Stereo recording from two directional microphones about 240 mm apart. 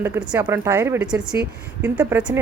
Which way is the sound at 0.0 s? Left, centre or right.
Centre.